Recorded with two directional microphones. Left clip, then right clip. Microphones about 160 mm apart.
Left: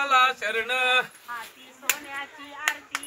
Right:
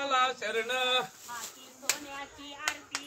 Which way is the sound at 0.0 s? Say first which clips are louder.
Left 8 dB; 5° right (ahead or behind).